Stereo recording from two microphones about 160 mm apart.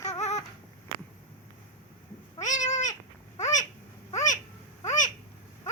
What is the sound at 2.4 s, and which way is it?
Cat, 50° left (ahead or behind).